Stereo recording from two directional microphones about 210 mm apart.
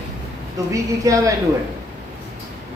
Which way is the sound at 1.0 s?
15° right (ahead or behind).